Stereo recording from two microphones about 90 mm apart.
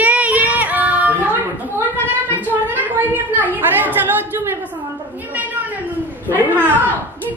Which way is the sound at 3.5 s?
20° right (ahead or behind).